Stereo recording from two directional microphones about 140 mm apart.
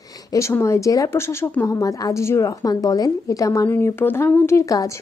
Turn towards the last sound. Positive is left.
turn(degrees=25)  # may be behind; listen again after turning